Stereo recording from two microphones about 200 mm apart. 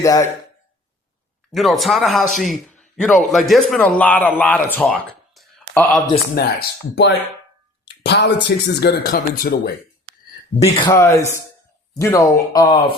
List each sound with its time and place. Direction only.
0.0 s speech: 15° left (ahead or behind)
1.5 s a man's voice: centre (ahead or behind)
6.3 s speech: 55° left (ahead or behind)
7.9 s a sound: 60° left (ahead or behind)
8.4 s speech: 55° left (ahead or behind)
10.6 s speech: 20° left (ahead or behind)